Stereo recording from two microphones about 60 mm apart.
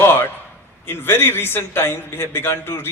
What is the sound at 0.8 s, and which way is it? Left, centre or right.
A man's voice, left.